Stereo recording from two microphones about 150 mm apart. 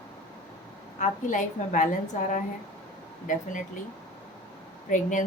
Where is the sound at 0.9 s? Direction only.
55° left (ahead or behind).